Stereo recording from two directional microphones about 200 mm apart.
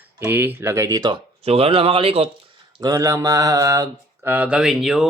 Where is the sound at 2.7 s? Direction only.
20° right (ahead or behind).